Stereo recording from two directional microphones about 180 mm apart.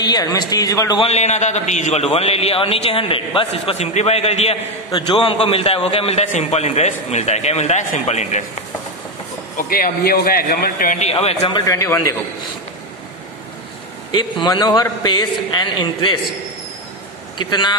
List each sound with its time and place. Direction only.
0.0 s speech: 20° left (ahead or behind)
1.0 s a man's voice: 40° left (ahead or behind)
9.6 s a man's voice: 55° left (ahead or behind)
11.0 s a man's voice: 35° left (ahead or behind)
11.7 s a man's voice: 20° left (ahead or behind)
14.1 s speech: 25° left (ahead or behind)
17.4 s speech: 25° left (ahead or behind)